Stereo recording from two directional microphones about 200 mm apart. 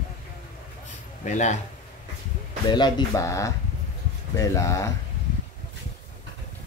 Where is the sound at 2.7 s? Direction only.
20° left (ahead or behind).